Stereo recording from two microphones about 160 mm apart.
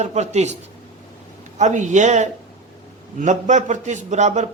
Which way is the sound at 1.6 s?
50° right (ahead or behind).